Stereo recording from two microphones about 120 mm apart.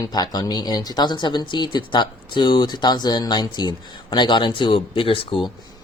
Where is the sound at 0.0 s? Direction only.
35° left (ahead or behind).